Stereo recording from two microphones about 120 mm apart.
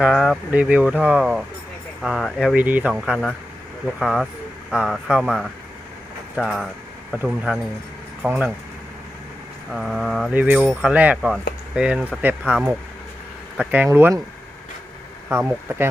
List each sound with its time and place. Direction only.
0.0 s speech: centre (ahead or behind)
2.6 s speech: 15° right (ahead or behind)
6.3 s speech: centre (ahead or behind)
9.7 s speech: centre (ahead or behind)
10.3 s speech: 10° right (ahead or behind)
13.6 s speech: 15° right (ahead or behind)
15.3 s speech: 20° right (ahead or behind)